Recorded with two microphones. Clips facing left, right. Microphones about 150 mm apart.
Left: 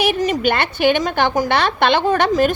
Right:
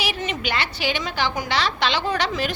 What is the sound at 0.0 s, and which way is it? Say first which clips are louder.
A woman's voice: left 10 dB; 45° left (ahead or behind).